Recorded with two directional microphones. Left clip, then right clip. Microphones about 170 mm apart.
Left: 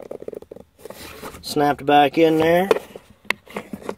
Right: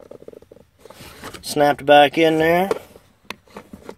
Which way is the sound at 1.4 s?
5° left (ahead or behind).